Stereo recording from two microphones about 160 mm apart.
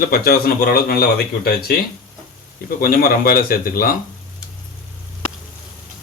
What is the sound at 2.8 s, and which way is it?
Speech, 65° left (ahead or behind).